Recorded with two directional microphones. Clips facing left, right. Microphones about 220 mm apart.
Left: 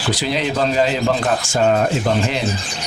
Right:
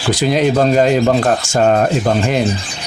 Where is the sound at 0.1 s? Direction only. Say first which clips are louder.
Right 7 dB; 45° right (ahead or behind).